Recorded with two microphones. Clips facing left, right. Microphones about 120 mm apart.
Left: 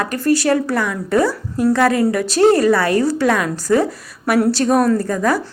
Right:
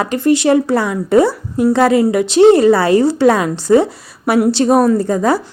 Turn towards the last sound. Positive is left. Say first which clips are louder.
# right 3 dB
turn(degrees=-25)  # may be behind; listen again after turning